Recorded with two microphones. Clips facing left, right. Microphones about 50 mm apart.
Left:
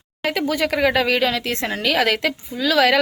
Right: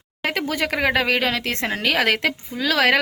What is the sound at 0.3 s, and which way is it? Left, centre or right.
Speech, right.